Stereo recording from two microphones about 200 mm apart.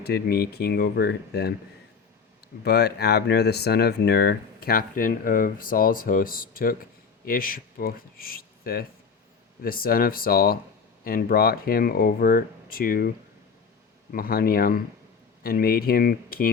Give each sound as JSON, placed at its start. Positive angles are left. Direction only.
{"t": 0.0, "sound": "speech", "side_deg": 55}
{"t": 2.6, "sound": "speech", "side_deg": 55}
{"t": 14.1, "sound": "speech", "side_deg": 45}